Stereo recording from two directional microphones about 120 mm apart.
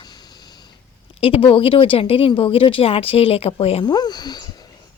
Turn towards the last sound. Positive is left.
turn(degrees=35)  # may be behind; listen again after turning